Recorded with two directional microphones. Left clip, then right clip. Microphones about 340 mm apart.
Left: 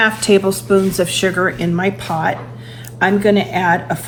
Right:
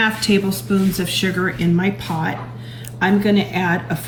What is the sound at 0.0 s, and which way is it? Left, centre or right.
Speech, centre.